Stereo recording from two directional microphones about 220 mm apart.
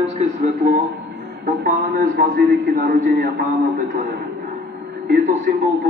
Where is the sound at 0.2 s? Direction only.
35° right (ahead or behind).